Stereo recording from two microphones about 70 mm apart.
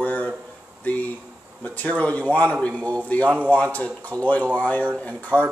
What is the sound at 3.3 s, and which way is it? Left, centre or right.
Speech, right.